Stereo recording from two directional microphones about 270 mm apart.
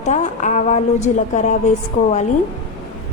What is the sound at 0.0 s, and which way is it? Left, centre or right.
A woman's voice, left.